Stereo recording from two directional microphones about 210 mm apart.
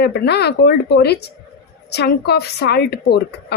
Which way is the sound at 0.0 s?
50° left (ahead or behind).